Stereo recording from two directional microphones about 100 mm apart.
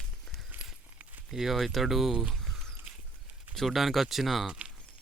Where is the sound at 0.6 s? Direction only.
15° right (ahead or behind).